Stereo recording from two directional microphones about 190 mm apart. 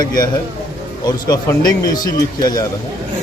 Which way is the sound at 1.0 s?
20° left (ahead or behind).